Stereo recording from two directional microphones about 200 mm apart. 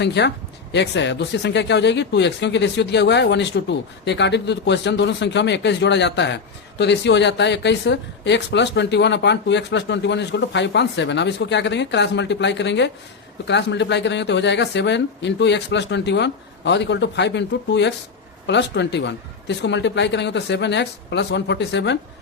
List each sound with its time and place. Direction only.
0.0 s speech: 60° left (ahead or behind)